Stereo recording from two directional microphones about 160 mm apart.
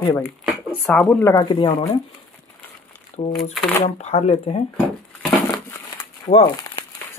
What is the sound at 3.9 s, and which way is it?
Speech, 45° left (ahead or behind).